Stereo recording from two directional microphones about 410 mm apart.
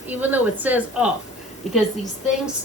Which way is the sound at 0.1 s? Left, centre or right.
Centre.